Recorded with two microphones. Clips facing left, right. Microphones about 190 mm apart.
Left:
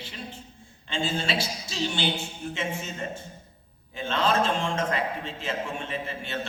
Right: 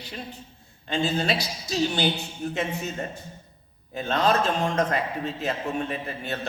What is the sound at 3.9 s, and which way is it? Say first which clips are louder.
A man's voice: right 2 dB; 40° right (ahead or behind).